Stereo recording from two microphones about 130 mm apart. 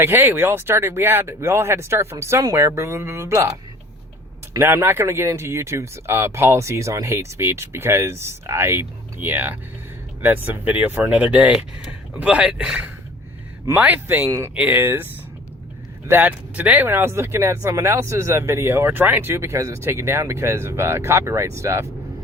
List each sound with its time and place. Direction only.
0.0 s speech: 15° right (ahead or behind)
4.5 s speech: 20° right (ahead or behind)
14.3 s speech: 25° right (ahead or behind)
14.5 s speech: 10° right (ahead or behind)
16.0 s speech: 15° right (ahead or behind)